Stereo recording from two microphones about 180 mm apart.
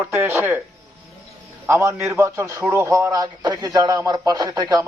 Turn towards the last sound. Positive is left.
turn(degrees=-20)  # may be behind; listen again after turning